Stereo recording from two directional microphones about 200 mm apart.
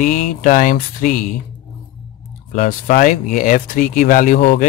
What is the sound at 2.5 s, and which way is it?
Speech, 45° left (ahead or behind).